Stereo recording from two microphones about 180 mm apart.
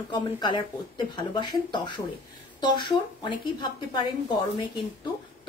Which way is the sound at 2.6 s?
25° left (ahead or behind).